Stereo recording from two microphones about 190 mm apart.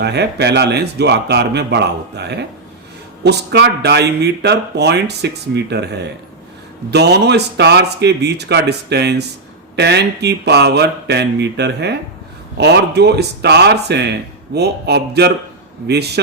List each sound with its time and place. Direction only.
0.0 s speech: 60° right (ahead or behind)